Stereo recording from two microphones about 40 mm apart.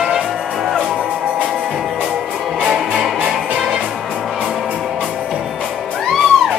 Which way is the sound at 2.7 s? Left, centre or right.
Centre.